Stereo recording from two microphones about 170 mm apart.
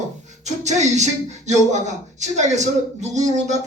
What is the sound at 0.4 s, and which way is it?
Speech, 45° right (ahead or behind).